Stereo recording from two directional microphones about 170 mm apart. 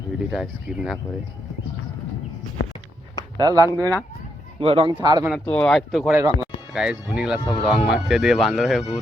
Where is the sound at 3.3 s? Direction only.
25° right (ahead or behind).